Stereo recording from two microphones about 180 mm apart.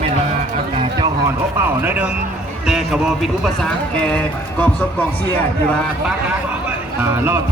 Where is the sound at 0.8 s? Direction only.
25° right (ahead or behind).